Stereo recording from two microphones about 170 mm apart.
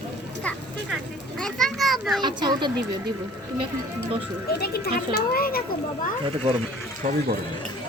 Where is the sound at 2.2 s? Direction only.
25° right (ahead or behind).